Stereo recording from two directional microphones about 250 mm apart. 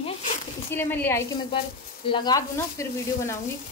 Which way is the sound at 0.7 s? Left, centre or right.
Centre.